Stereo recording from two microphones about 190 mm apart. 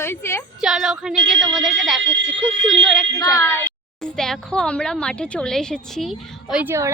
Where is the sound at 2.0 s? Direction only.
70° right (ahead or behind).